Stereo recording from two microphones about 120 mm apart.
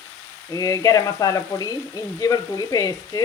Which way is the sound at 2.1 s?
30° left (ahead or behind).